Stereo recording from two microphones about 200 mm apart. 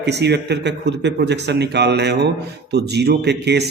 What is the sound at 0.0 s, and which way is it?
A man's voice, 55° right (ahead or behind).